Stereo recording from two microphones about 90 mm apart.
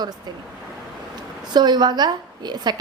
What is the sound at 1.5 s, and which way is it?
A woman's voice, 55° right (ahead or behind).